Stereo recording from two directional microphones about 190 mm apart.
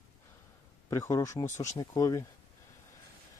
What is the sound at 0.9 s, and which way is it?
A man's voice, 15° left (ahead or behind).